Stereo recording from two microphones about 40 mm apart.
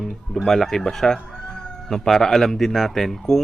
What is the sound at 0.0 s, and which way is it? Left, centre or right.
Speech, centre.